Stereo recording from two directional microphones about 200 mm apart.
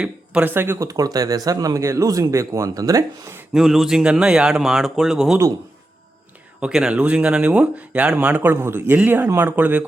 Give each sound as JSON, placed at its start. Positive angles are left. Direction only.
{"t": 0.0, "sound": "speech", "side_deg": -5}
{"t": 3.5, "sound": "speech", "side_deg": 0}
{"t": 6.6, "sound": "speech", "side_deg": -5}